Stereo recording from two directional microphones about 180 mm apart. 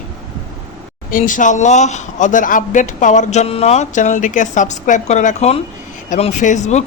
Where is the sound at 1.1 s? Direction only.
45° left (ahead or behind).